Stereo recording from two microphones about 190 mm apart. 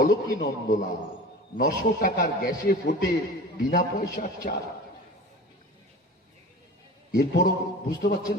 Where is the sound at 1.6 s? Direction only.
50° left (ahead or behind).